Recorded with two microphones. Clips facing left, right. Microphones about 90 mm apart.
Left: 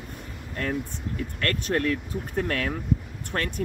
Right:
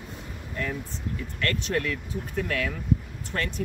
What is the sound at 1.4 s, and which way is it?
Speech, 50° left (ahead or behind).